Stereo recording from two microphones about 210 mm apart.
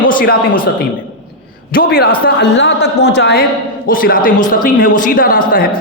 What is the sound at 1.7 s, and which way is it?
Speech, 45° left (ahead or behind).